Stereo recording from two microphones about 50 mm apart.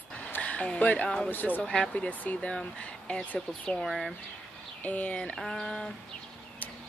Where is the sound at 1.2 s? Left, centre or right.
Left.